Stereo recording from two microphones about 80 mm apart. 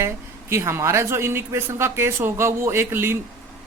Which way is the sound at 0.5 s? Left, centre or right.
Right.